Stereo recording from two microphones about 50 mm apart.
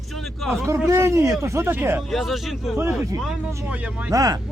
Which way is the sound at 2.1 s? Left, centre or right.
Centre.